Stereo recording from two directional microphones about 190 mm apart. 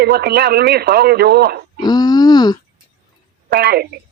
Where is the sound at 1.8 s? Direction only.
20° left (ahead or behind).